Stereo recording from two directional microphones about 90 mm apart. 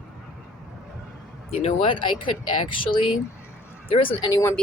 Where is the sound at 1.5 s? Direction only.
80° left.